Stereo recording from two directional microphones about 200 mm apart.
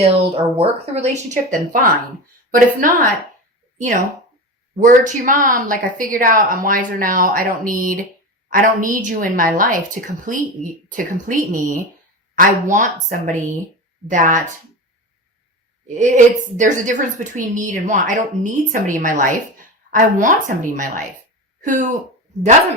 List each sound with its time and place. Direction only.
0.0 s a woman's voice: 30° right (ahead or behind)
16.0 s a woman's voice: 40° right (ahead or behind)